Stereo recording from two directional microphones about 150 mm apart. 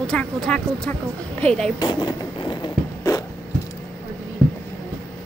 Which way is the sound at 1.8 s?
25° left (ahead or behind).